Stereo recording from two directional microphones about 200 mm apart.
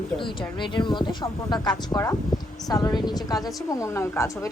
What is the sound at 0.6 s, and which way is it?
A woman's voice, 25° left (ahead or behind).